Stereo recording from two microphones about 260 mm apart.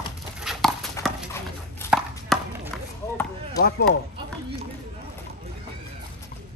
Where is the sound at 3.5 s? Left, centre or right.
Left.